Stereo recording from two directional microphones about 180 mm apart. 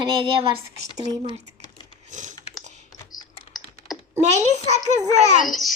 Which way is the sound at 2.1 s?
45° right (ahead or behind).